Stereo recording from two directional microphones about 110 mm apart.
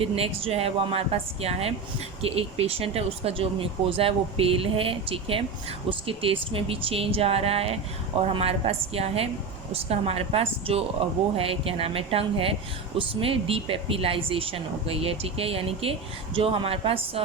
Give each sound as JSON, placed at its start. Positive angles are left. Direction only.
{"t": 0.0, "sound": "speech", "side_deg": -60}